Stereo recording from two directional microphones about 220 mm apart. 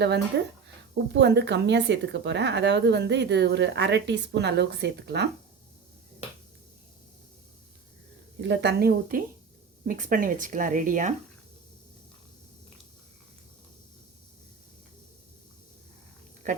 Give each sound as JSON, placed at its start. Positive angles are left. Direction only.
{"t": 0.3, "sound": "speech", "side_deg": -50}
{"t": 8.4, "sound": "speech", "side_deg": -50}